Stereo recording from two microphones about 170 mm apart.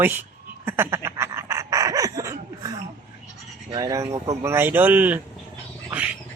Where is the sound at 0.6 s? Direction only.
15° right (ahead or behind).